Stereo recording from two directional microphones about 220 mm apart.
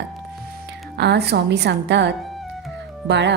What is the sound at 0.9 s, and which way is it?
Speech, 50° right (ahead or behind).